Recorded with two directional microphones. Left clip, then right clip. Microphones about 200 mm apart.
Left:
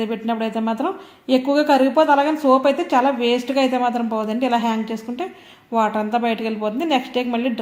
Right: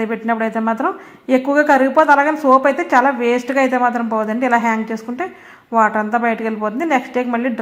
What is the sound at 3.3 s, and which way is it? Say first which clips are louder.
Speech: right 3 dB; 15° right (ahead or behind).